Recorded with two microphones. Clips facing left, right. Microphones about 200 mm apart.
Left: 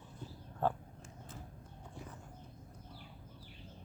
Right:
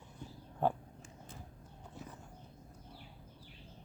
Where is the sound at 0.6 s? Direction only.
15° right (ahead or behind).